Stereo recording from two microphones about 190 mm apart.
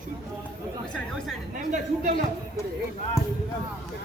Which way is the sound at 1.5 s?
45° right (ahead or behind).